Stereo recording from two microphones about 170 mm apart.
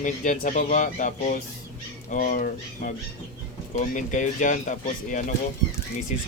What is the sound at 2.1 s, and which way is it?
Speech, 50° left (ahead or behind).